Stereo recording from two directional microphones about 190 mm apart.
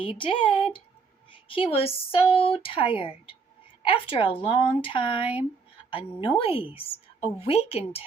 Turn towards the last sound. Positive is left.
turn(degrees=30)  # may be behind; listen again after turning